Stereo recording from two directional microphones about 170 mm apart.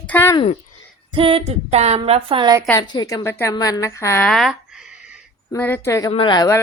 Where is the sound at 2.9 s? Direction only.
25° left (ahead or behind).